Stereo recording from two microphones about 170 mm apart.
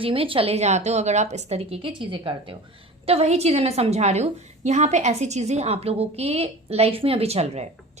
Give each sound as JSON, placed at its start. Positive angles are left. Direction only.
{"t": 0.0, "sound": "a woman's voice", "side_deg": -30}